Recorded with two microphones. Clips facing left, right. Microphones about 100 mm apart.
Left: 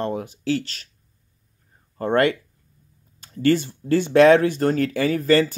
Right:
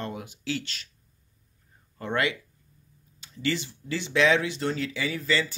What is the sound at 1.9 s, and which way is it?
Speech, 45° left (ahead or behind).